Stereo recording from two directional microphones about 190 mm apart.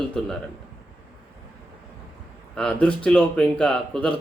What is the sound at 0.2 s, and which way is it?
Speech, centre (ahead or behind).